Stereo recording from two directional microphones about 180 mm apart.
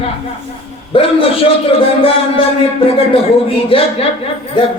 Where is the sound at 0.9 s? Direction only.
30° left (ahead or behind).